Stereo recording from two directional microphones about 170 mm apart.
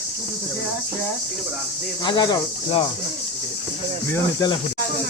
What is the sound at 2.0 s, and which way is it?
Speech, 25° left (ahead or behind).